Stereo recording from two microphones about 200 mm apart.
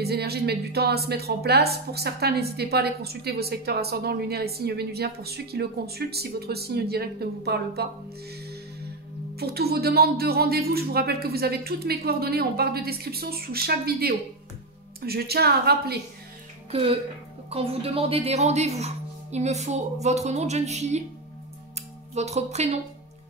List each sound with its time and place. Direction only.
0.0 s a woman's voice: 55° right (ahead or behind)
9.3 s a woman's voice: 50° right (ahead or behind)
16.7 s speech: 30° right (ahead or behind)
22.1 s speech: 35° right (ahead or behind)